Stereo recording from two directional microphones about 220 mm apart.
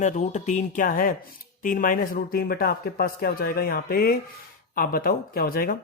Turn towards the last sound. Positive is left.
turn(degrees=40)  # may be behind; listen again after turning